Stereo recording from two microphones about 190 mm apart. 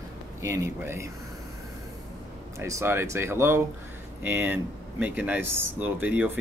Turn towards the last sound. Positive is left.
turn(degrees=-10)  # may be behind; listen again after turning